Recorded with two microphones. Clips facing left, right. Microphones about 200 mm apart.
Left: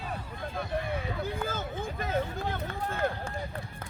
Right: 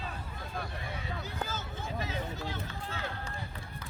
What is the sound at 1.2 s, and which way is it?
Run, 55° left (ahead or behind).